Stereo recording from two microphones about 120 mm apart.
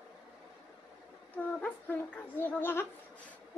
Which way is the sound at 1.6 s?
15° left (ahead or behind).